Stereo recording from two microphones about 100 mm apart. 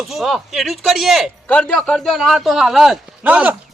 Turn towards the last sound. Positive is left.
turn(degrees=-15)  # may be behind; listen again after turning